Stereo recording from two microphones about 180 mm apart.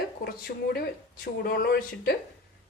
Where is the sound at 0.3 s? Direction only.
55° left (ahead or behind).